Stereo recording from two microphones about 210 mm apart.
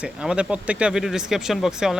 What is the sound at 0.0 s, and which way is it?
Speech, 5° right (ahead or behind).